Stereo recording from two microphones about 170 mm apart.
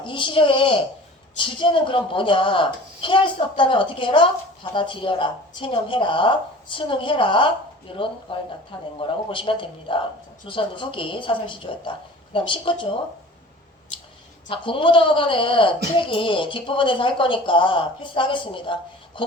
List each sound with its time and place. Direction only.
0.0 s a woman's voice: 30° left (ahead or behind)
14.5 s a woman's voice: 30° left (ahead or behind)